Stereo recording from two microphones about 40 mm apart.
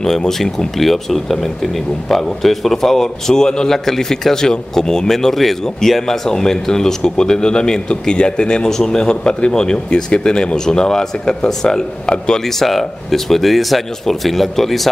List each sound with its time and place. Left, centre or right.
0.0 s speech: centre
8.6 s speech: centre
12.4 s speech: centre